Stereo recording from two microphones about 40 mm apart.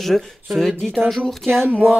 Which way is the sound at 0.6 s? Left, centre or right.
Centre.